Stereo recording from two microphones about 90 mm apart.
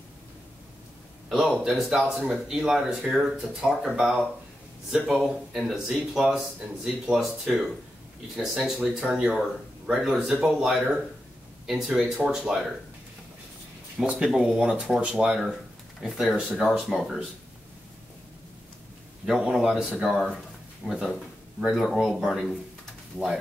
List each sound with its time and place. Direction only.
1.5 s speech: 5° right (ahead or behind)
4.9 s speech: 5° right (ahead or behind)
13.9 s speech: 10° right (ahead or behind)
19.2 s speech: 5° right (ahead or behind)